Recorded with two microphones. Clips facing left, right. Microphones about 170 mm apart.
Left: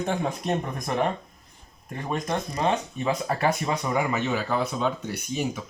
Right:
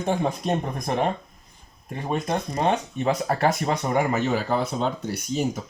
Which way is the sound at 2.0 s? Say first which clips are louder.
Right 2 dB; 30° right (ahead or behind).